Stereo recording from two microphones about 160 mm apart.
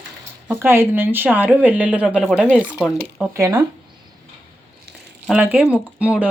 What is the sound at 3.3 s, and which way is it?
Speech, 20° right (ahead or behind).